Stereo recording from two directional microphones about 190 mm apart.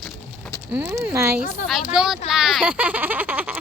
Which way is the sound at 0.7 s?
10° right (ahead or behind).